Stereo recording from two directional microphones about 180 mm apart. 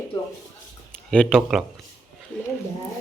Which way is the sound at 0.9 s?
5° left (ahead or behind).